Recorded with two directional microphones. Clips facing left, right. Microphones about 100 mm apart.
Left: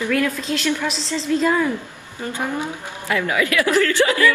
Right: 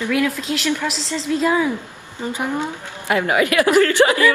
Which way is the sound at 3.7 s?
45° right (ahead or behind).